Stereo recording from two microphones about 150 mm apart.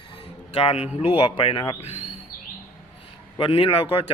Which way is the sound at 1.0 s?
40° left (ahead or behind).